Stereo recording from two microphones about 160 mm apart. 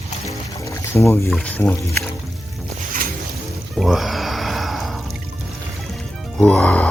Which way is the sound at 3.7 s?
Centre (ahead or behind).